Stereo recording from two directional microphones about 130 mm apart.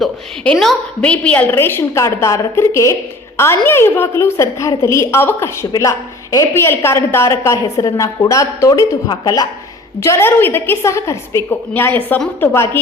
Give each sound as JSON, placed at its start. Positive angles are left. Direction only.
{"t": 0.0, "sound": "a woman's voice", "side_deg": 0}